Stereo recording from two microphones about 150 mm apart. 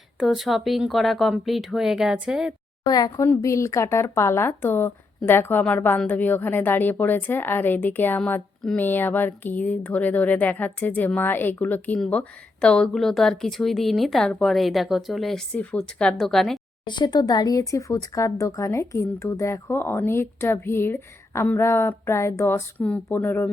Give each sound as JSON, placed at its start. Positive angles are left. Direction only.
{"t": 0.2, "sound": "speech", "side_deg": 0}
{"t": 2.8, "sound": "speech", "side_deg": 25}
{"t": 16.8, "sound": "speech", "side_deg": 30}